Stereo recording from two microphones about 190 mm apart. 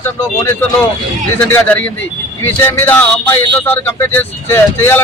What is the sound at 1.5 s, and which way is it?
Speech, 10° left (ahead or behind).